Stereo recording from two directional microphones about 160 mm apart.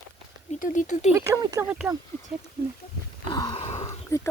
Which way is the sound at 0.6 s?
50° left (ahead or behind).